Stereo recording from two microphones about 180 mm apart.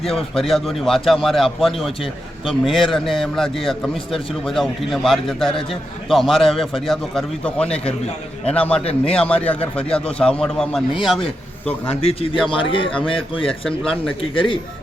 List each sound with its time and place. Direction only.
0.0 s a man's voice: 30° left (ahead or behind)
0.3 s a man's voice: centre (ahead or behind)
12.0 s speech: 30° left (ahead or behind)
13.7 s a man's voice: 5° left (ahead or behind)
14.3 s speech: 30° left (ahead or behind)